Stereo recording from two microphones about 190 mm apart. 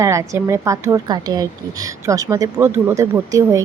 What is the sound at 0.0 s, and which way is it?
A woman's voice, 15° right (ahead or behind).